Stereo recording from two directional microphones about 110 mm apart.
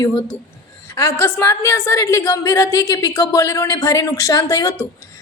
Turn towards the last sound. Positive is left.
turn(degrees=30)  # may be behind; listen again after turning